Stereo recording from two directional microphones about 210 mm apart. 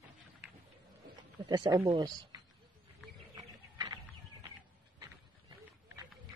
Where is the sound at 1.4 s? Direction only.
20° right (ahead or behind).